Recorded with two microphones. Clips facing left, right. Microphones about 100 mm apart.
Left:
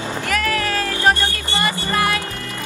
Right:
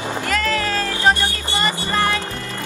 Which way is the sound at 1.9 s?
10° left (ahead or behind).